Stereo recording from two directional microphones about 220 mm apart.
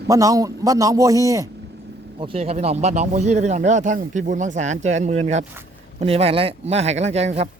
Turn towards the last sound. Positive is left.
turn(degrees=-30)  # may be behind; listen again after turning